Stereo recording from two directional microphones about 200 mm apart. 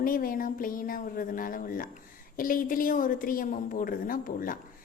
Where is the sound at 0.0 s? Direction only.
45° left (ahead or behind).